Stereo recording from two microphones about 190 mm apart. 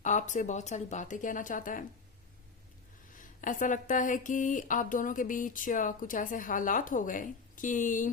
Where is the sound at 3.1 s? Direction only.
45° left (ahead or behind).